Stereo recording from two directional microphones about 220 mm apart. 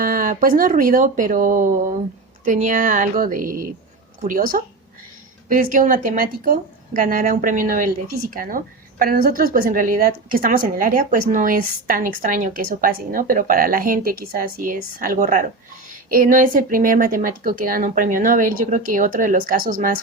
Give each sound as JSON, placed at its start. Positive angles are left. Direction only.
{"t": 0.0, "sound": "a woman's voice", "side_deg": -40}